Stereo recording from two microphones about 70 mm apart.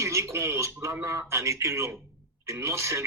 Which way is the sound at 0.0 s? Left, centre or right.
Right.